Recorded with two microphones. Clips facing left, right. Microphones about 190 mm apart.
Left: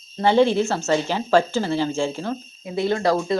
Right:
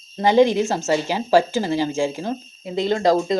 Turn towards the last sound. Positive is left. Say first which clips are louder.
# right 2 dB
turn(degrees=-20)  # may be behind; listen again after turning